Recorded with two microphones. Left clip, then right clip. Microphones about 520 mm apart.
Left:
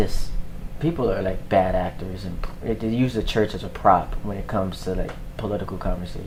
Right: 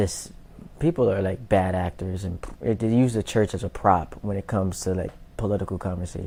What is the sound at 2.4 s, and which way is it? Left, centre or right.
Speech, right.